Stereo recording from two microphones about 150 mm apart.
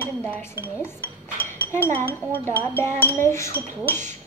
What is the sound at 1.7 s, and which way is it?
Child singing, 15° left (ahead or behind).